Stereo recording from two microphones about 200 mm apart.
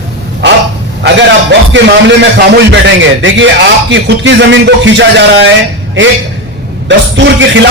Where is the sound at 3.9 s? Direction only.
65° right (ahead or behind).